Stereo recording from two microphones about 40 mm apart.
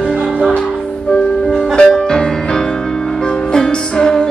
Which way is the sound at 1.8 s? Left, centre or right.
Centre.